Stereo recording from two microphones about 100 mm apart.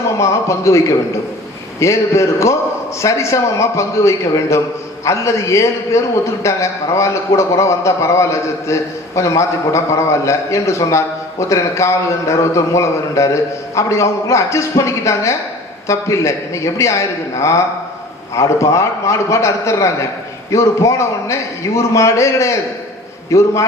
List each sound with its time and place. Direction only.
0.2 s a man's voice: 30° left (ahead or behind)
18.3 s a man's voice: 30° left (ahead or behind)